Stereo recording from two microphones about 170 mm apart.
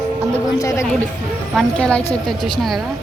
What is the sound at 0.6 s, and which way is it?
Speech, 20° left (ahead or behind).